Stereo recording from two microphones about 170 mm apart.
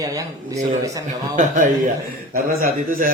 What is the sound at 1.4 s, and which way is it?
A man's voice, 50° right (ahead or behind).